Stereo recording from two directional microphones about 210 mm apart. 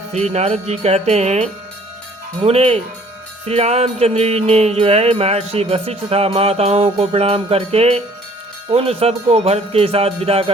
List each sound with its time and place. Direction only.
0.1 s jingle bell: 30° right (ahead or behind)
2.4 s music: 30° right (ahead or behind)